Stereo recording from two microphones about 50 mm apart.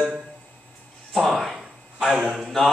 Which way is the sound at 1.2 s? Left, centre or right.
Centre.